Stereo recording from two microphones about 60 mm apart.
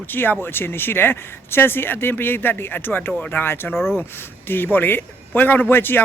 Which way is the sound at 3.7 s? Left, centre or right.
Centre.